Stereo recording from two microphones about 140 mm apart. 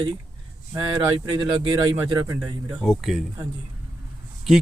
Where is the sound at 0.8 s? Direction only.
35° right (ahead or behind).